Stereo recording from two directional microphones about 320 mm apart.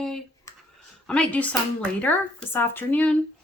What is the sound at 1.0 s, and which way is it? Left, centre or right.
Speech, centre.